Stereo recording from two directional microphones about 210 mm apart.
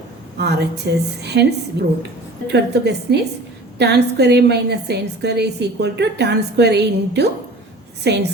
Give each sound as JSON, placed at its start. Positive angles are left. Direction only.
{"t": 0.3, "sound": "a woman's voice", "side_deg": -50}